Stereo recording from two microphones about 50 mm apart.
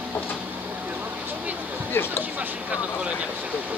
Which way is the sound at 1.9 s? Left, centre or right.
Left.